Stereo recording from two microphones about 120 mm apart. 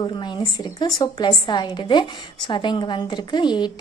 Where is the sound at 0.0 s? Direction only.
40° left (ahead or behind).